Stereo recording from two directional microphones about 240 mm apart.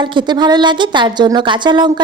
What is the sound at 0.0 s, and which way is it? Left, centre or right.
A woman's voice, centre.